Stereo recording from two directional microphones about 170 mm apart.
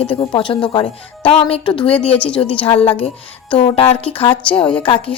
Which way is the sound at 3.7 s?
35° left (ahead or behind).